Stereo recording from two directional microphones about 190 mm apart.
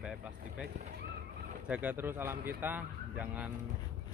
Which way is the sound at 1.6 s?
10° right (ahead or behind).